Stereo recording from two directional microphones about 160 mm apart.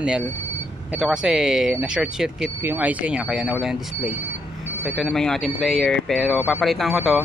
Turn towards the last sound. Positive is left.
turn(degrees=0)  # may be behind; listen again after turning